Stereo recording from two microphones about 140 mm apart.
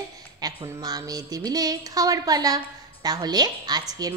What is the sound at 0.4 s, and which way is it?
A woman's voice, 25° right (ahead or behind).